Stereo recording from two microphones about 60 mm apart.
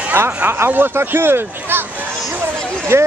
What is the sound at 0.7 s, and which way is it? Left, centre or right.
Speech, right.